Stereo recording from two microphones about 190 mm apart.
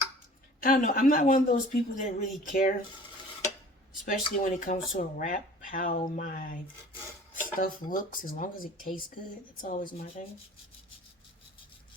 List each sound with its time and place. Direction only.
0.6 s speech: 45° left (ahead or behind)
4.0 s speech: 45° left (ahead or behind)
7.6 s speech: 45° left (ahead or behind)